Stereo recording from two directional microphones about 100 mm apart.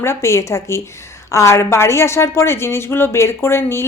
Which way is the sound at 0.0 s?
25° left (ahead or behind).